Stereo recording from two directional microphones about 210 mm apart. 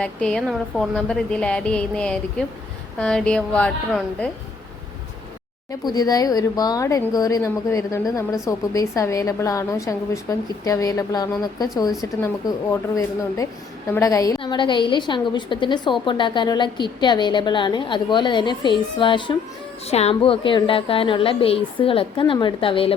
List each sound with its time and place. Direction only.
0.0 s a woman's voice: 5° left (ahead or behind)
5.8 s a woman's voice: 20° left (ahead or behind)